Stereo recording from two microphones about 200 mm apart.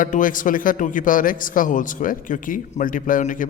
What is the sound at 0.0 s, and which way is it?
A man's voice, 40° left (ahead or behind).